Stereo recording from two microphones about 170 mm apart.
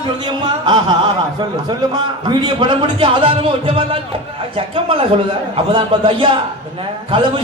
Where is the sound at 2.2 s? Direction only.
30° right (ahead or behind).